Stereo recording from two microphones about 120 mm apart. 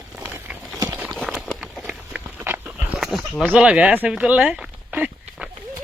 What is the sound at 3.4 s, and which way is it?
Speech, 10° right (ahead or behind).